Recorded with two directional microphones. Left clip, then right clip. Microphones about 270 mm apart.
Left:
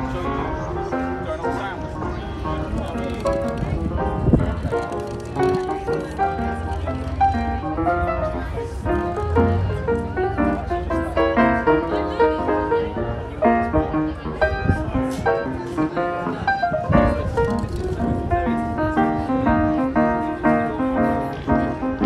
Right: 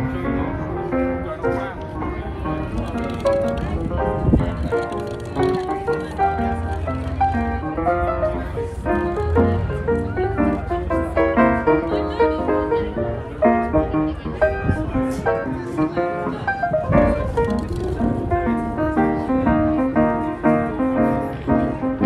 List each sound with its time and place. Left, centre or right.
4.0 s music: centre